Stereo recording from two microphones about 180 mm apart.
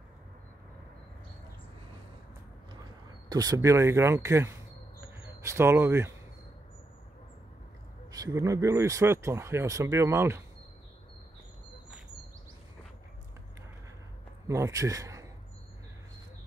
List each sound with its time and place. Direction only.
3.3 s speech: 20° right (ahead or behind)
8.1 s speech: 20° right (ahead or behind)
14.5 s speech: 15° right (ahead or behind)